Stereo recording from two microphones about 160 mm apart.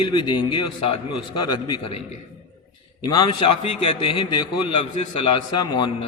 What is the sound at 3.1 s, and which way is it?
A man's voice, 30° left (ahead or behind).